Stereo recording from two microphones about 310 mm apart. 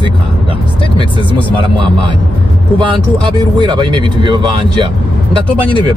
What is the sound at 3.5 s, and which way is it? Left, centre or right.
Speech, centre.